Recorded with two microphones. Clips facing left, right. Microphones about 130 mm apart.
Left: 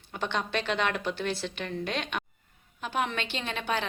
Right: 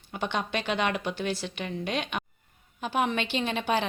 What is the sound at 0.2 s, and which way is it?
A woman's voice, 5° right (ahead or behind).